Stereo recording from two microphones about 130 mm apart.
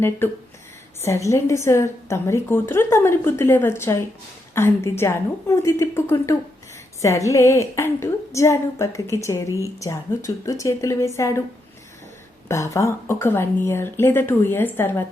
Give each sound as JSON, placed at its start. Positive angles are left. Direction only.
{"t": 0.2, "sound": "a woman's voice", "side_deg": 15}
{"t": 12.5, "sound": "speech", "side_deg": 25}